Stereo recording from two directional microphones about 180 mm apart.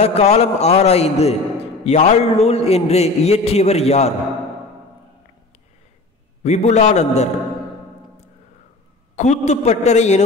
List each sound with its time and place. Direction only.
0.0 s a man's voice: 35° left (ahead or behind)
6.4 s a man's voice: 40° left (ahead or behind)
9.1 s a man's voice: 40° left (ahead or behind)